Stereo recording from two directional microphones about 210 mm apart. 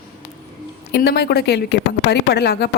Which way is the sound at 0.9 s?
50° left (ahead or behind).